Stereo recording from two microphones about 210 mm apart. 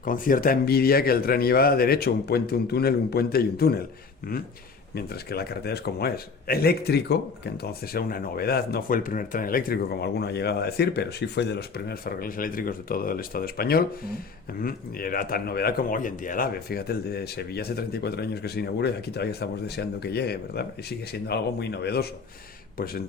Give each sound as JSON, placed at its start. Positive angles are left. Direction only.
{"t": 0.0, "sound": "speech", "side_deg": 40}
{"t": 4.9, "sound": "speech", "side_deg": 50}